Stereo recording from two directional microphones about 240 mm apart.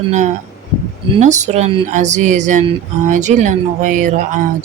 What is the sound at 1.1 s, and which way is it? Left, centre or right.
Speech, right.